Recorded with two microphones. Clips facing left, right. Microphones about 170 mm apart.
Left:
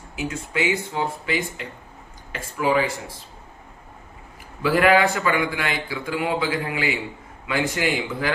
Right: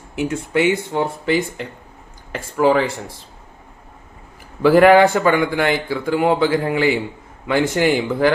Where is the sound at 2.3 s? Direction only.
50° right (ahead or behind).